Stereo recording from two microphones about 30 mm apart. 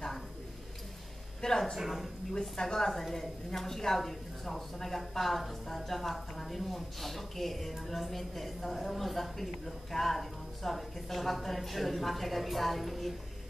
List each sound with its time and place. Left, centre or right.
1.4 s a sound: left
1.8 s speech: centre
2.5 s a woman's voice: centre